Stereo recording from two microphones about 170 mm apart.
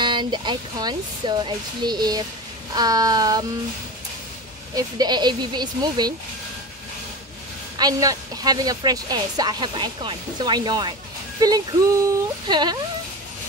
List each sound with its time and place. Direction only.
0.0 s a woman's voice: 30° right (ahead or behind)
4.7 s a woman's voice: 25° right (ahead or behind)
7.7 s a woman's voice: 20° right (ahead or behind)